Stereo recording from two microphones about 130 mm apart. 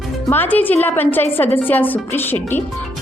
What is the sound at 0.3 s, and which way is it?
A woman's voice, 15° left (ahead or behind).